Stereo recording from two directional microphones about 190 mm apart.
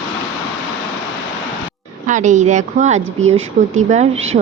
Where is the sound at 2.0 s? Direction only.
40° right (ahead or behind).